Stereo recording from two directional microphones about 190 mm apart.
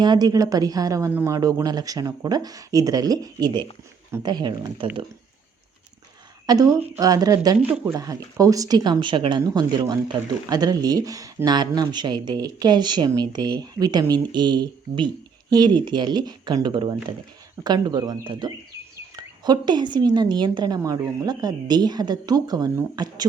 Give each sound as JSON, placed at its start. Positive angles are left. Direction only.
{"t": 0.0, "sound": "speech", "side_deg": -20}
{"t": 6.4, "sound": "speech", "side_deg": -20}